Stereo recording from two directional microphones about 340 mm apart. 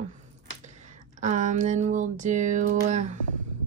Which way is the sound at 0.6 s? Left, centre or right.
Right.